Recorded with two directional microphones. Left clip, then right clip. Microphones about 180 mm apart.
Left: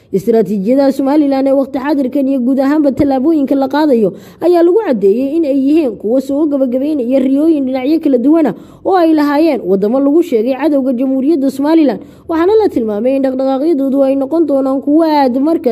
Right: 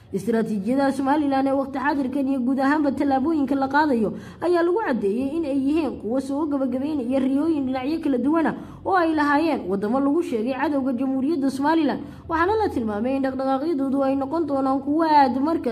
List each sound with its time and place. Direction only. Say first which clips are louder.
0.3 s a woman's voice: left 12 dB; 40° left (ahead or behind)